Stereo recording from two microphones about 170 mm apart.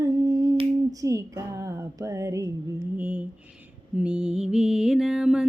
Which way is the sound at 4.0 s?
5° right (ahead or behind).